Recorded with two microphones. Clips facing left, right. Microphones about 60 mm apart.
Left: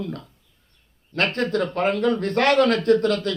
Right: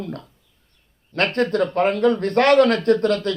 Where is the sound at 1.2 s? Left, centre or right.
Right.